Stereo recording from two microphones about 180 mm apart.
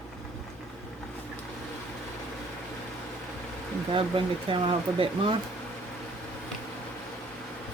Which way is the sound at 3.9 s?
30° right (ahead or behind).